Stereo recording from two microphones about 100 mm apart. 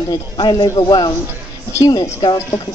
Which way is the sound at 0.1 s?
45° left (ahead or behind).